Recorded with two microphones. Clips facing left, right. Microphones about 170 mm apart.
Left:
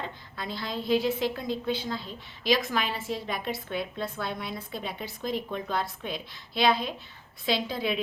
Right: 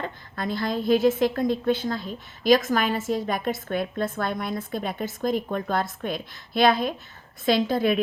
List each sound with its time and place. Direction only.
0.3 s a woman's voice: 50° right (ahead or behind)